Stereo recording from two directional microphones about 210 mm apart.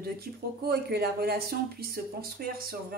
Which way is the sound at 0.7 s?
50° right (ahead or behind).